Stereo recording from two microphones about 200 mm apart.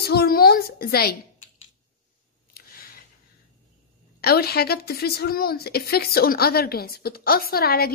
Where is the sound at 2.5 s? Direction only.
45° left (ahead or behind).